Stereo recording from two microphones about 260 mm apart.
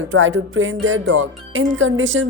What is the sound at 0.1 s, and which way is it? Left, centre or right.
Speech, right.